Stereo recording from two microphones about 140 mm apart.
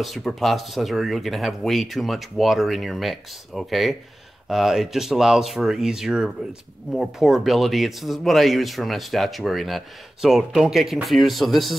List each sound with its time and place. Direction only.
0.0 s speech: centre (ahead or behind)